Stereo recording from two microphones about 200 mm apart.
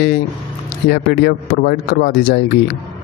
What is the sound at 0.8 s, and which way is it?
Speech, 55° left (ahead or behind).